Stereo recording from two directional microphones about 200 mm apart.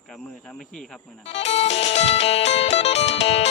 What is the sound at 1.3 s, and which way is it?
Music, 30° left (ahead or behind).